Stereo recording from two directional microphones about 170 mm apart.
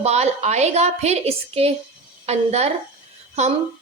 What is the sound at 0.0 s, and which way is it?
A woman's voice, 40° right (ahead or behind).